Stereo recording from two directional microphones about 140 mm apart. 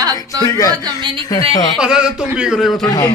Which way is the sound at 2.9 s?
25° left (ahead or behind).